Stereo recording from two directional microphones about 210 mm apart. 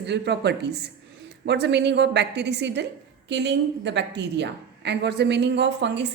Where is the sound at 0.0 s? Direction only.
55° right (ahead or behind).